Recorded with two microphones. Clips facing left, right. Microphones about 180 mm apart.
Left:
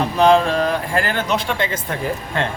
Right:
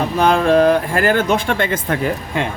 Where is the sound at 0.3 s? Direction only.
50° right (ahead or behind).